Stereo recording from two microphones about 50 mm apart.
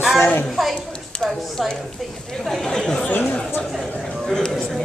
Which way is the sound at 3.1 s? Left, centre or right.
Left.